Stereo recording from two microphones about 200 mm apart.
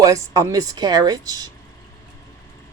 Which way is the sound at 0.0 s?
15° right (ahead or behind).